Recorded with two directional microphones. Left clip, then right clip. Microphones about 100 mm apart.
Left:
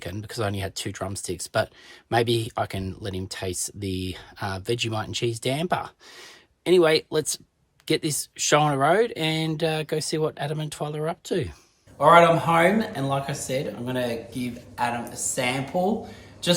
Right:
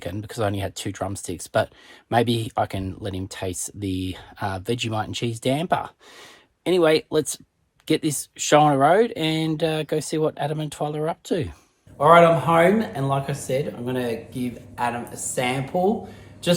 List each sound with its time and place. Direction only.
0.0 s speech: 20° left (ahead or behind)
11.9 s speech: 10° right (ahead or behind)